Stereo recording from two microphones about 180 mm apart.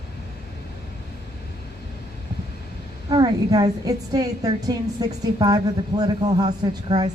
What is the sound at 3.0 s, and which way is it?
A woman's voice, 25° right (ahead or behind).